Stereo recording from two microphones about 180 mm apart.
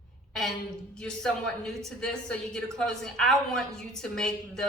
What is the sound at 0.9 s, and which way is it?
A woman's voice, 5° left (ahead or behind).